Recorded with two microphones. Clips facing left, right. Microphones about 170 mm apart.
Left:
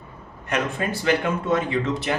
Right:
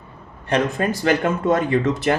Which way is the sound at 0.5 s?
40° right (ahead or behind).